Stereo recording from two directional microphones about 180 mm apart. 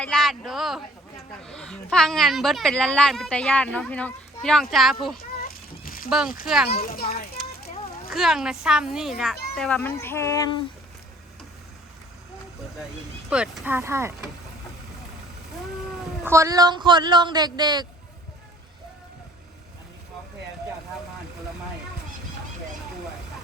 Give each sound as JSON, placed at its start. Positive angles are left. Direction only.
{"t": 0.0, "sound": "a woman's voice", "side_deg": 5}
{"t": 5.1, "sound": "a sound", "side_deg": 55}
{"t": 6.1, "sound": "a woman's voice", "side_deg": -5}
{"t": 6.9, "sound": "a child's voice", "side_deg": 55}
{"t": 7.4, "sound": "a sound", "side_deg": 0}
{"t": 8.1, "sound": "a woman's voice", "side_deg": 0}
{"t": 13.3, "sound": "speech", "side_deg": -10}
{"t": 16.2, "sound": "speech", "side_deg": -15}